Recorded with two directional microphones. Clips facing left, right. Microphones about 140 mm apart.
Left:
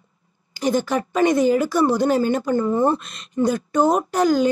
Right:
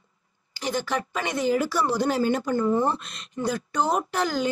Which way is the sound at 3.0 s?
50° left (ahead or behind).